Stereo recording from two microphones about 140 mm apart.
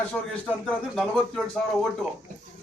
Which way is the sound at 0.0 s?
10° left (ahead or behind).